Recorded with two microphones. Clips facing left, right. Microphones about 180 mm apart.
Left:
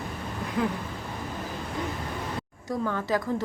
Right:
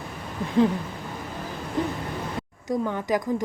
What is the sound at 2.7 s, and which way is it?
Speech, 15° right (ahead or behind).